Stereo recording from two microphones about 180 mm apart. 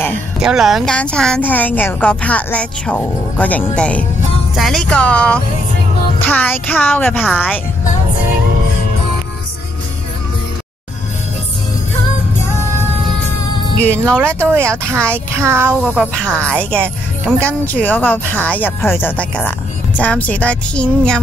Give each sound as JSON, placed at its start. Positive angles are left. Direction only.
{"t": 0.4, "sound": "speech", "side_deg": -5}
{"t": 14.0, "sound": "a child's voice", "side_deg": -10}
{"t": 16.2, "sound": "speech", "side_deg": 5}